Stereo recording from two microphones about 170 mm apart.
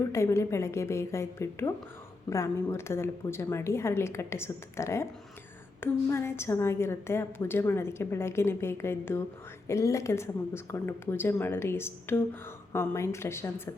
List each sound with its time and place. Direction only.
0.1 s a woman's voice: 15° left (ahead or behind)